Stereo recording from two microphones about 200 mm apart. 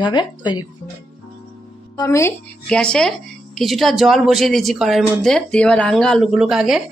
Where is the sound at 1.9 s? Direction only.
15° left (ahead or behind).